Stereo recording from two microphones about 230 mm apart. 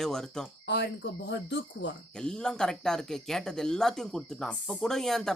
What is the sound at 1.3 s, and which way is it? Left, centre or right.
Speech, left.